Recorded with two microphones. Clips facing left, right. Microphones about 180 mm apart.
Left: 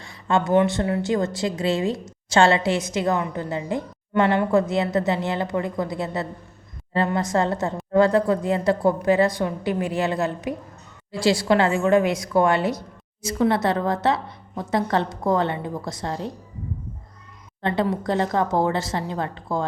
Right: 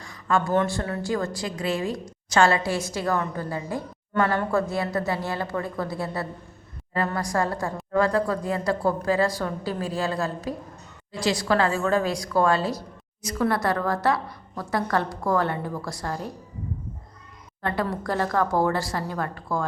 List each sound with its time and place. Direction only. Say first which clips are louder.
0.0 s a sound: left 2 dB; 25° left (ahead or behind)
0.5 s a woman's voice: left 5 dB; 15° left (ahead or behind)
17.6 s a woman's voice: left 4 dB; 20° left (ahead or behind)